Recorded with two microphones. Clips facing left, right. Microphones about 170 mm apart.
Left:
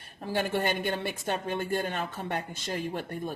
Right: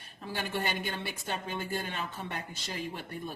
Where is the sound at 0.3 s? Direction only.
50° left (ahead or behind).